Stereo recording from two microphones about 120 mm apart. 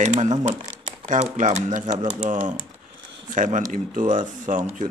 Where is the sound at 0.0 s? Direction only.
85° right.